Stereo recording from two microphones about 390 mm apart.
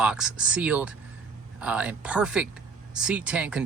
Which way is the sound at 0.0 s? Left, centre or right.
Centre.